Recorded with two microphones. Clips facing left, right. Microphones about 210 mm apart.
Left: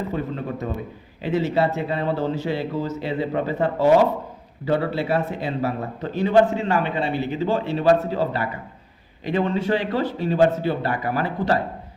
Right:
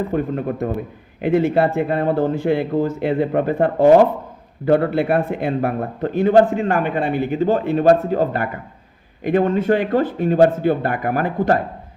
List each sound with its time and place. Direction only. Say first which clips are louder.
0.1 s a man's voice: right 6 dB; 55° right (ahead or behind)